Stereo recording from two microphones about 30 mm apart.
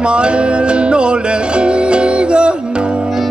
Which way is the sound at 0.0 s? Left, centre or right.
Right.